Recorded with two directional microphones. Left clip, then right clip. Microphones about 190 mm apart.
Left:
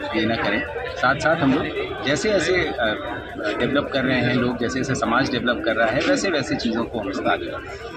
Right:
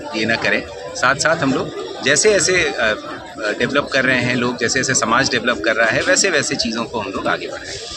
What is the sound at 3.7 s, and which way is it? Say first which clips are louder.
Speech: right 8 dB; 30° right (ahead or behind).